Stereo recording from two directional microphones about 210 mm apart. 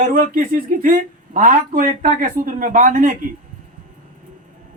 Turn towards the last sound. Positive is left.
turn(degrees=-40)  # may be behind; listen again after turning